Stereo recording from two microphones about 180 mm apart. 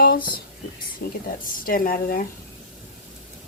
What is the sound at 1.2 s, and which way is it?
Speech, 55° left (ahead or behind).